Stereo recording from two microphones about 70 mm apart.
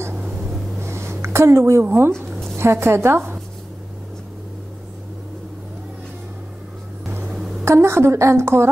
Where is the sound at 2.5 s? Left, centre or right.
Right.